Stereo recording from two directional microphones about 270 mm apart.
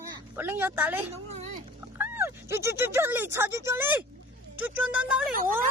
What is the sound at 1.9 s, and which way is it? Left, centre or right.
Speech, centre.